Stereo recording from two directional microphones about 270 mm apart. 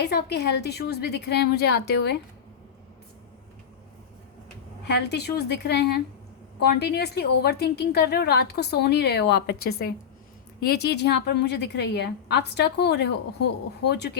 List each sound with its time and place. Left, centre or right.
0.0 s a woman's voice: left
4.9 s a woman's voice: left